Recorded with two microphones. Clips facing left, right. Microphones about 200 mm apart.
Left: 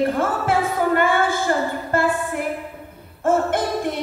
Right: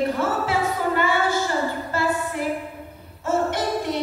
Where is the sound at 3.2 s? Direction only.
50° left (ahead or behind).